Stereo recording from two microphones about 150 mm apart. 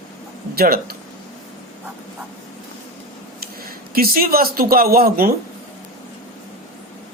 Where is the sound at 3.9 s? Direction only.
75° right (ahead or behind).